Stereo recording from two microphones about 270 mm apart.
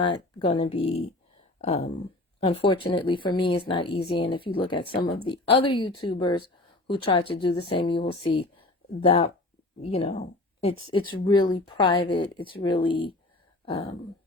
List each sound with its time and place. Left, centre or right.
0.3 s speech: left